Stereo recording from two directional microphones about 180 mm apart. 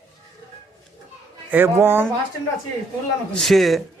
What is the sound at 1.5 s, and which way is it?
Speech, 10° right (ahead or behind).